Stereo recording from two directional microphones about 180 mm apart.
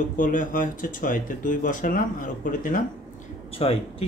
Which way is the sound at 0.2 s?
45° left (ahead or behind).